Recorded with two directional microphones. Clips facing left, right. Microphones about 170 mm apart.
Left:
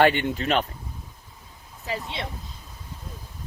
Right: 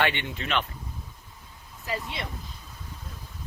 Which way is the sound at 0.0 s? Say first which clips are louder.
Left 8 dB; 40° left (ahead or behind).